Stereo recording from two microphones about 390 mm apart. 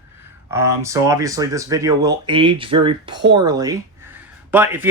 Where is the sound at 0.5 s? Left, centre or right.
Centre.